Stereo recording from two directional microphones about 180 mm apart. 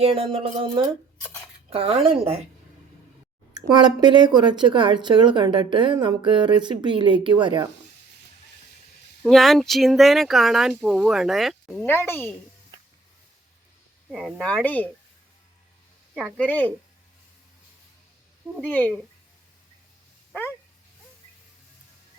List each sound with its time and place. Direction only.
0.0 s speech: 30° right (ahead or behind)
3.5 s speech: 25° right (ahead or behind)
9.2 s speech: centre (ahead or behind)
11.9 s speech: 10° left (ahead or behind)
14.1 s speech: centre (ahead or behind)
16.1 s speech: 5° left (ahead or behind)
18.6 s speech: 10° left (ahead or behind)